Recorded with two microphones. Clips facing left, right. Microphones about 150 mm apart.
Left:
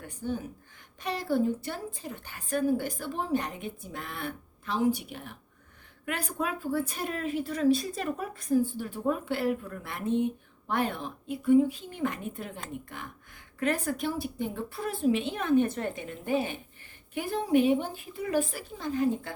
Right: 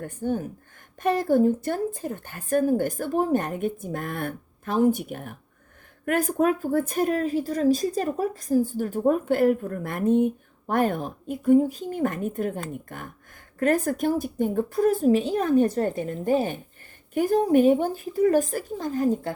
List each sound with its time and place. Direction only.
0.0 s a woman's voice: 50° right (ahead or behind)